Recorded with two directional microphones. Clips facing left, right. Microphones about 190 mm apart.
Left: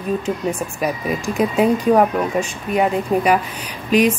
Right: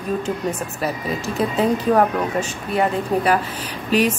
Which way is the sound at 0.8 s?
15° left (ahead or behind).